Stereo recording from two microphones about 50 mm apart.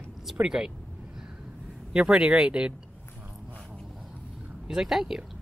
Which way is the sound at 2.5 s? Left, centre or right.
Right.